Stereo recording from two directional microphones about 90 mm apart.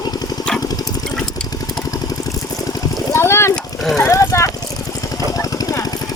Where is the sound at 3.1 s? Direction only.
30° left (ahead or behind).